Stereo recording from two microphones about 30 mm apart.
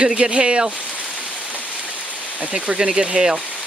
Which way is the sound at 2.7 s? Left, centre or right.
Right.